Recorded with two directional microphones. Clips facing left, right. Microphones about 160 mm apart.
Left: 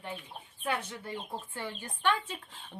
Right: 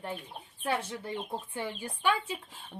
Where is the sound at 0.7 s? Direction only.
30° right (ahead or behind).